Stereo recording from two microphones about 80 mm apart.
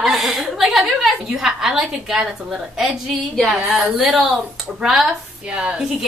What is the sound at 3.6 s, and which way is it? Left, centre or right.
Speech, centre.